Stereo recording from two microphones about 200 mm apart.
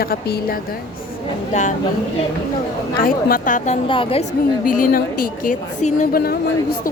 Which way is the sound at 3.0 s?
45° left (ahead or behind).